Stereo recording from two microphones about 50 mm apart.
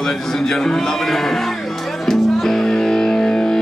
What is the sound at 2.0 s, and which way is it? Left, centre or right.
Music, centre.